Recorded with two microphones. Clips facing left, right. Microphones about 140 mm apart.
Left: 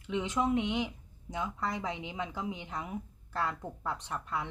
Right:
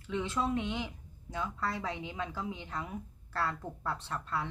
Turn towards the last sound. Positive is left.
turn(degrees=15)  # may be behind; listen again after turning